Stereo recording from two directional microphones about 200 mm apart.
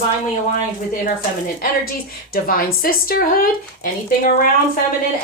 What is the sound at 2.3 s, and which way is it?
Speech, 45° left (ahead or behind).